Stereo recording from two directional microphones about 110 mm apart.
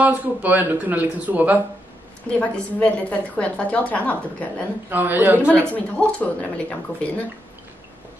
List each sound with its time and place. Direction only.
0.0 s speech: 15° right (ahead or behind)
2.2 s a woman's voice: 10° left (ahead or behind)
4.8 s speech: 15° right (ahead or behind)
5.7 s a woman's voice: 10° left (ahead or behind)